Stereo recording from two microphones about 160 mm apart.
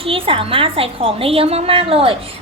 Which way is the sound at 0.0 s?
35° right (ahead or behind).